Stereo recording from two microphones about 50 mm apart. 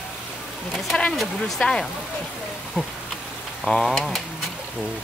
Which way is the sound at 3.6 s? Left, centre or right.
Centre.